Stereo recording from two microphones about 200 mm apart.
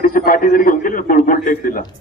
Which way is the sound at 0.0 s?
45° left (ahead or behind).